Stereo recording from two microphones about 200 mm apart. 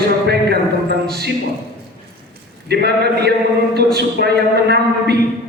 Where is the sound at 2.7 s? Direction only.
55° right (ahead or behind).